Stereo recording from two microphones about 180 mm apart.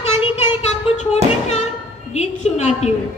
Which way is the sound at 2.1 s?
35° left (ahead or behind).